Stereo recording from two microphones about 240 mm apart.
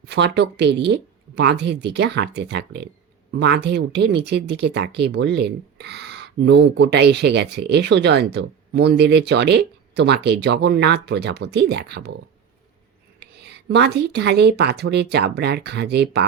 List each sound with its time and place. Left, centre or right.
0.0 s speech: right